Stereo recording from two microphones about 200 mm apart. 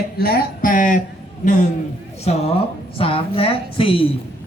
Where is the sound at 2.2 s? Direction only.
30° left (ahead or behind).